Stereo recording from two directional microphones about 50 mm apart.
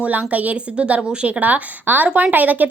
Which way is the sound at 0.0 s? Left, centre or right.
Right.